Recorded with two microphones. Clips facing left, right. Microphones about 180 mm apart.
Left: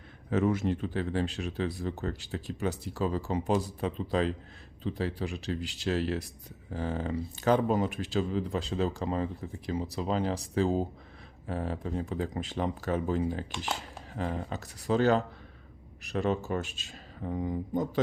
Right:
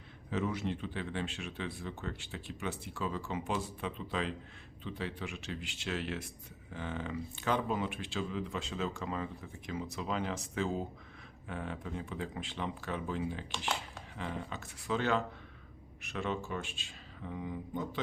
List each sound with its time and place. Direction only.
0.3 s speech: 50° left (ahead or behind)